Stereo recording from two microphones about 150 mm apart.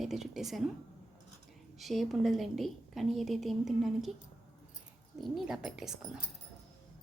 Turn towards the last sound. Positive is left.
turn(degrees=-5)  # may be behind; listen again after turning